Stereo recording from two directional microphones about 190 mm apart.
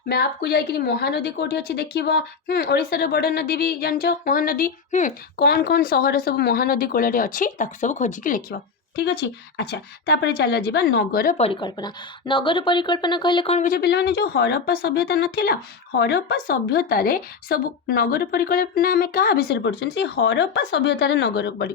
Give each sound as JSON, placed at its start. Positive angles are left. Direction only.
{"t": 0.1, "sound": "speech", "side_deg": 55}
{"t": 5.4, "sound": "speech", "side_deg": 55}
{"t": 9.6, "sound": "speech", "side_deg": 60}
{"t": 11.3, "sound": "a woman's voice", "side_deg": 30}
{"t": 13.6, "sound": "speech", "side_deg": 50}